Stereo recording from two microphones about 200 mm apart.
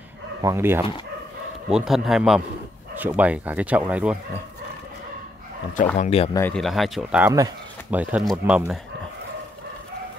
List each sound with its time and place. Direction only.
0.4 s speech: 15° right (ahead or behind)
5.9 s speech: 30° left (ahead or behind)
6.3 s speech: 5° left (ahead or behind)